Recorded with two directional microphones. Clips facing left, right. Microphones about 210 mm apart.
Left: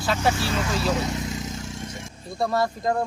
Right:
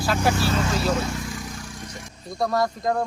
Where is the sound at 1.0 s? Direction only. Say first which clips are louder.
Left 2 dB; 20° left (ahead or behind).